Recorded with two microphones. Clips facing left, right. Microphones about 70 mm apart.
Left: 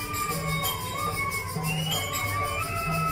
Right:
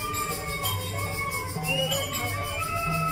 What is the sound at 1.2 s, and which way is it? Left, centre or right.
Music, left.